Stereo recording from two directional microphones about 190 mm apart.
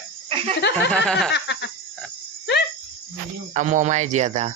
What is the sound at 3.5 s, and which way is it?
Speech, 40° right (ahead or behind).